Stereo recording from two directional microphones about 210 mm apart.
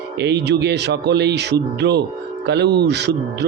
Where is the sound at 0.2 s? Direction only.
55° right (ahead or behind).